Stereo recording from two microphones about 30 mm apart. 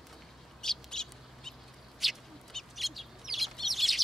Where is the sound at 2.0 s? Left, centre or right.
Centre.